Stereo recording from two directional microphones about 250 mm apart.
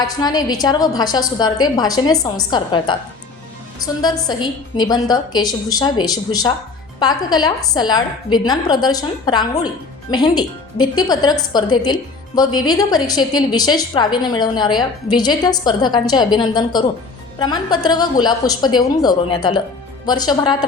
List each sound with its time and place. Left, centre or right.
0.0 s a woman's voice: centre
4.0 s a woman's voice: centre